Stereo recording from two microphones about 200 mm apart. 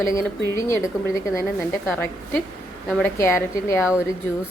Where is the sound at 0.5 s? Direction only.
15° left (ahead or behind).